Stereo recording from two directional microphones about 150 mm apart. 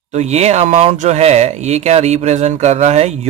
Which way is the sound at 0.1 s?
45° right (ahead or behind).